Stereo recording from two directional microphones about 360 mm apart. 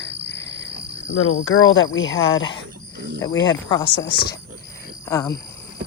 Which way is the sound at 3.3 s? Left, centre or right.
Left.